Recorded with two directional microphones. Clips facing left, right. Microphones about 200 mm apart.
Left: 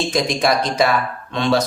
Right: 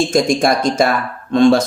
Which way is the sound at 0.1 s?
45° right (ahead or behind).